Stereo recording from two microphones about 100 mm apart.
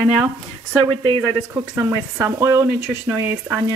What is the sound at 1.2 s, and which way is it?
Speech, 25° right (ahead or behind).